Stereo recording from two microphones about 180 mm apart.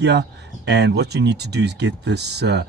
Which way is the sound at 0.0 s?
70° right (ahead or behind).